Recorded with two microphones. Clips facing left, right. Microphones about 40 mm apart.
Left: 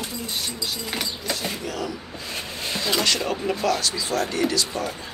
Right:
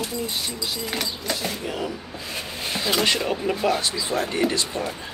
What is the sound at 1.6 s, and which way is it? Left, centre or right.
Speech, right.